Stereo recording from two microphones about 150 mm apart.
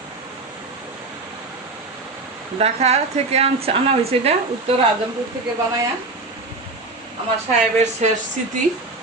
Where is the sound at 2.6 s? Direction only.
45° right (ahead or behind).